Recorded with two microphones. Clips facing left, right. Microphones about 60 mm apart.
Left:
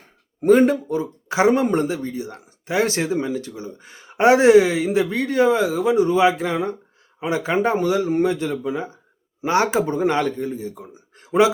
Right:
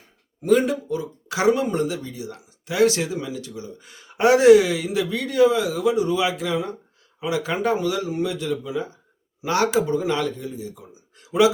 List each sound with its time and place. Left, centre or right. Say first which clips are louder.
0.4 s speech: left 4 dB; left